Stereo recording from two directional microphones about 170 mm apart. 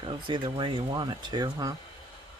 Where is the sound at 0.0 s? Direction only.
30° right (ahead or behind).